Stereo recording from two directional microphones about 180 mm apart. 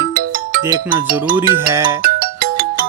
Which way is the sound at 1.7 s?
20° right (ahead or behind).